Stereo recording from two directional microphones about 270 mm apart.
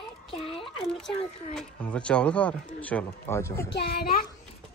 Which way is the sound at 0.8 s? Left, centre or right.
Centre.